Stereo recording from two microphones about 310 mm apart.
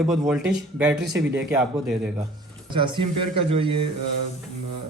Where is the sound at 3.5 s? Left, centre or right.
Centre.